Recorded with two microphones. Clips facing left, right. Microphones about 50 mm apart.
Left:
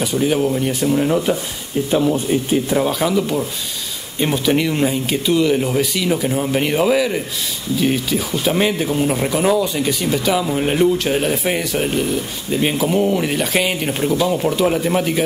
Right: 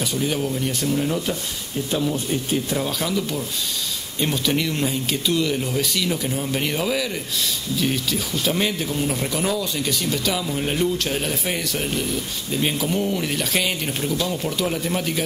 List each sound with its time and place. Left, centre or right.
0.0 s speech: centre
0.9 s speech: left